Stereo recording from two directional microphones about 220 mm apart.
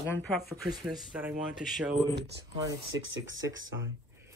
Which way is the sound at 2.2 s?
50° right (ahead or behind).